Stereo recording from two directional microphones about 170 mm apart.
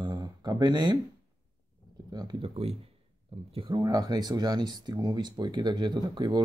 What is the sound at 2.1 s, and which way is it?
Speech, 30° right (ahead or behind).